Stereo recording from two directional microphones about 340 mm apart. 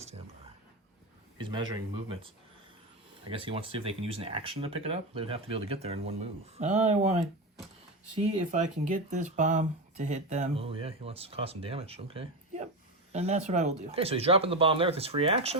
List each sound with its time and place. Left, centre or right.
1.4 s speech: centre
8.4 s speech: right